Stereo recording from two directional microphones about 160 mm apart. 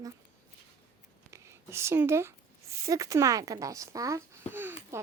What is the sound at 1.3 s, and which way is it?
A child's voice, 15° right (ahead or behind).